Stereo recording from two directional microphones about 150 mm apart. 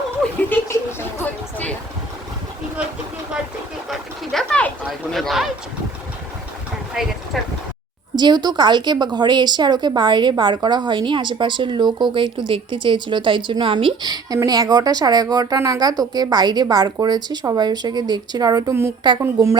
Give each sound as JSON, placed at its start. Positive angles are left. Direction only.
{"t": 0.5, "sound": "speech", "side_deg": 15}
{"t": 3.8, "sound": "speech", "side_deg": 0}
{"t": 7.3, "sound": "speech", "side_deg": 0}
{"t": 8.1, "sound": "speech", "side_deg": -30}